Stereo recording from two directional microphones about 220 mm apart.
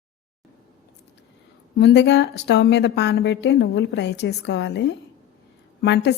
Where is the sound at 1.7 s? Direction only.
50° left (ahead or behind).